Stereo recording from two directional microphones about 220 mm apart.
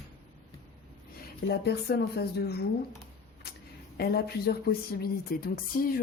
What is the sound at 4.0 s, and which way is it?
Speech, 45° left (ahead or behind).